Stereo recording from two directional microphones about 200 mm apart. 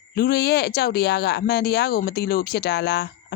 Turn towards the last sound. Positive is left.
turn(degrees=55)  # may be behind; listen again after turning